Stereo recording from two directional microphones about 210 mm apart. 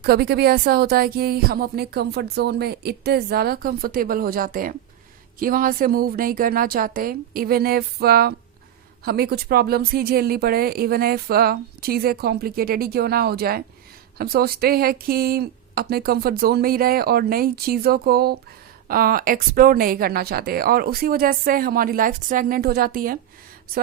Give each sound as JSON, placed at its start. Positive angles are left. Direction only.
{"t": 0.0, "sound": "speech", "side_deg": -50}